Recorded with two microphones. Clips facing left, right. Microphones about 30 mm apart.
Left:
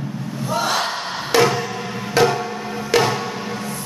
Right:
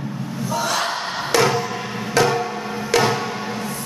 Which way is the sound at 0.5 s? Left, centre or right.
Left.